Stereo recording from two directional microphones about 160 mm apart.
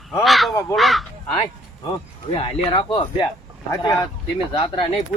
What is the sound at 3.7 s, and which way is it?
Speech, 20° left (ahead or behind).